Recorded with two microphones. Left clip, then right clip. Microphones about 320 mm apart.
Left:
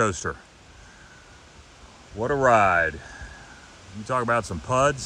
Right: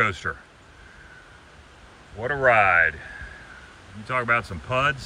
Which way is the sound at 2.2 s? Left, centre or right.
Centre.